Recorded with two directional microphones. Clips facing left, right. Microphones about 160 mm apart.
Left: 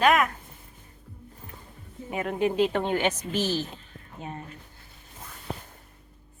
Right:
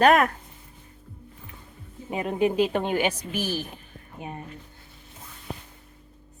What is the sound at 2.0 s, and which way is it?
A woman's voice, 20° right (ahead or behind).